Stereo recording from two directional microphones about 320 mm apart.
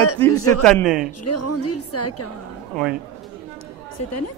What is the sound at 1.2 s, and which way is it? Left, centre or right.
A woman's voice, left.